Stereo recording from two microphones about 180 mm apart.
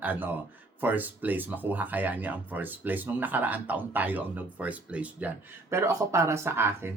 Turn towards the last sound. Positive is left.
turn(degrees=-15)  # may be behind; listen again after turning